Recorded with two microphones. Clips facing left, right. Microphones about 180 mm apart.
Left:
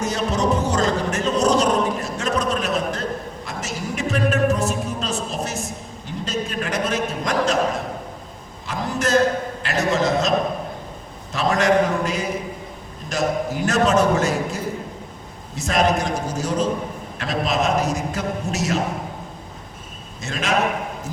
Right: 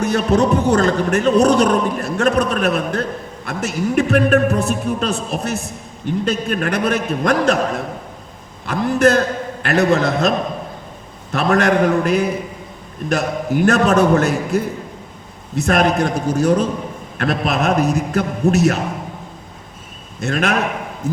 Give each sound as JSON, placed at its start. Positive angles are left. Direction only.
{"t": 0.0, "sound": "a man's voice", "side_deg": -60}
{"t": 8.6, "sound": "a man's voice", "side_deg": -60}
{"t": 20.2, "sound": "a man's voice", "side_deg": -60}